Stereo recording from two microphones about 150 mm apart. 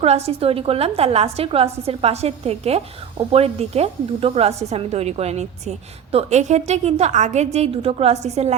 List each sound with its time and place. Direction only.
0.0 s a woman's voice: 45° right (ahead or behind)